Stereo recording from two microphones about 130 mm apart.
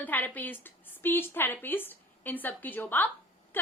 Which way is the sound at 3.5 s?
15° left (ahead or behind).